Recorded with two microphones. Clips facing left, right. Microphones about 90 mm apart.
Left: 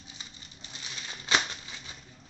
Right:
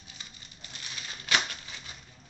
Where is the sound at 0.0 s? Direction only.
20° left (ahead or behind).